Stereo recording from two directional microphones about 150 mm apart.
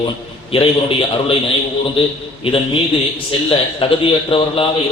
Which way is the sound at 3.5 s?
35° left (ahead or behind).